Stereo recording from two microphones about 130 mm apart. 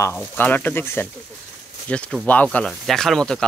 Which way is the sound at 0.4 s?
15° left (ahead or behind).